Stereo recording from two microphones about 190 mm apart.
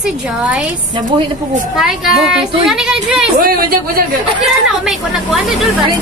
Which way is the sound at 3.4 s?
50° right (ahead or behind).